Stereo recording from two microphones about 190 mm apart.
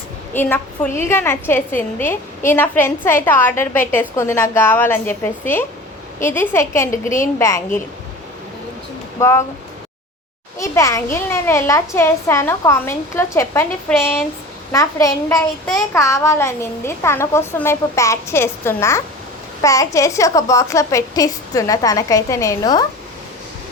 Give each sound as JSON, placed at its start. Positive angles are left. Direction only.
{"t": 0.3, "sound": "a woman's voice", "side_deg": 10}
{"t": 9.1, "sound": "speech", "side_deg": 15}
{"t": 10.6, "sound": "a woman's voice", "side_deg": 15}
{"t": 15.6, "sound": "a child's voice", "side_deg": 5}
{"t": 16.0, "sound": "a woman's voice", "side_deg": 15}